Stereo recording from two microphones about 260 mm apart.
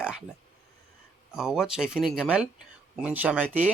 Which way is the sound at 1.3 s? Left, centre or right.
Centre.